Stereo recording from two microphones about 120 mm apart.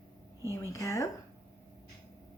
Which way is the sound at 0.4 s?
25° left (ahead or behind).